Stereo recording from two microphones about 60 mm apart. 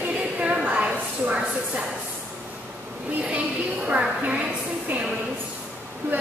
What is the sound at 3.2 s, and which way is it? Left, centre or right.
A woman's voice, centre.